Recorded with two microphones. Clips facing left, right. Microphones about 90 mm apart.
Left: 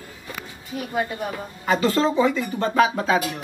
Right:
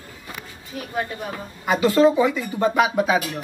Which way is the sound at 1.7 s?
15° right (ahead or behind).